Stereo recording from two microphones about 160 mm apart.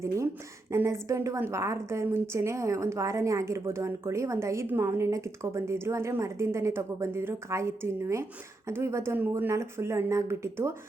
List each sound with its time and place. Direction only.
0.7 s a woman's voice: 20° right (ahead or behind)